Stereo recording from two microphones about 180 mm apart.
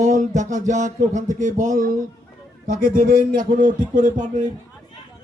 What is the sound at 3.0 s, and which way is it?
Speech, 50° right (ahead or behind).